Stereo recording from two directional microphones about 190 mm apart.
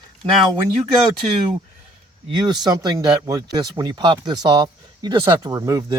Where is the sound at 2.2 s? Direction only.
20° right (ahead or behind).